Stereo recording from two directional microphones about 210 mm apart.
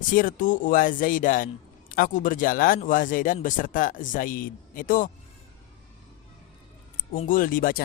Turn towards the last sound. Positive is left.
turn(degrees=40)  # may be behind; listen again after turning